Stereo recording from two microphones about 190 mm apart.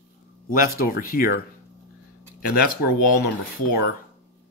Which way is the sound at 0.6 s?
50° left (ahead or behind).